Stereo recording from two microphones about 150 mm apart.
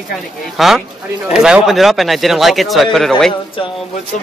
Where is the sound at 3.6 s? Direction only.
35° left (ahead or behind).